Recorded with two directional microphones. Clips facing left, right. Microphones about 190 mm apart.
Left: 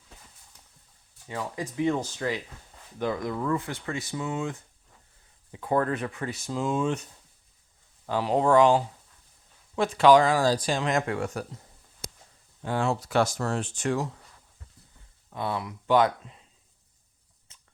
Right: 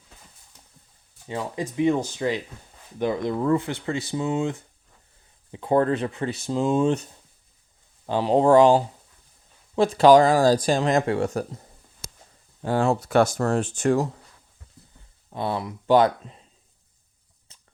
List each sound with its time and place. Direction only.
0.5 s horse: 25° right (ahead or behind)
1.3 s speech: 25° right (ahead or behind); by 11.6 s 40° right (ahead or behind)
12.6 s speech: 40° right (ahead or behind)
13.0 s speech: 55° right (ahead or behind)
15.3 s speech: 30° right (ahead or behind)
17.5 s a sound: 35° right (ahead or behind)